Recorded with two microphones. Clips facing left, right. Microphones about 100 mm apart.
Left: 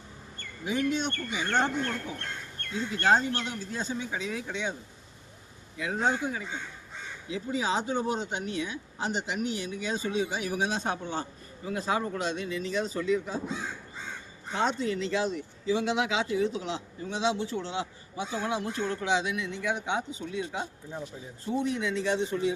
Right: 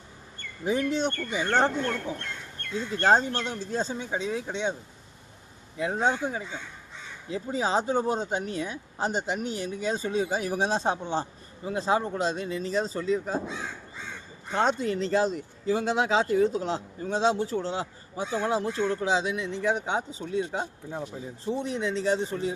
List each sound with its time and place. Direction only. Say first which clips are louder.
0.6 s speech: right 3 dB; 40° right (ahead or behind)
2.9 s speech: right 2 dB; 35° right (ahead or behind)
5.7 s speech: right 2 dB; 30° right (ahead or behind)
7.3 s speech: right 2 dB; 40° right (ahead or behind)
14.5 s speech: right 3 dB; 45° right (ahead or behind)
21.4 s speech: even; 30° right (ahead or behind)